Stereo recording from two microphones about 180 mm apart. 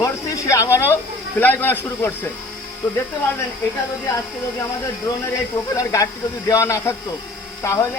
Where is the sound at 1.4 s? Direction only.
10° left (ahead or behind).